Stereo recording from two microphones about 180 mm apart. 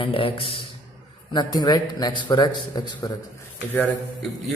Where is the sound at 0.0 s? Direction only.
30° left (ahead or behind).